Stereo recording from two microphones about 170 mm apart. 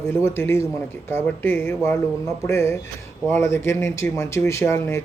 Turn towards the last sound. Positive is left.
turn(degrees=15)  # may be behind; listen again after turning